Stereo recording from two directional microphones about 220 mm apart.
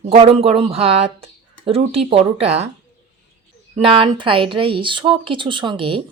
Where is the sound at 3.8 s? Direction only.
25° right (ahead or behind).